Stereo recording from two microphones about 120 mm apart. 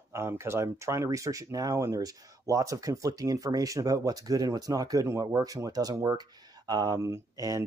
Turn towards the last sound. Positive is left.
turn(degrees=-30)  # may be behind; listen again after turning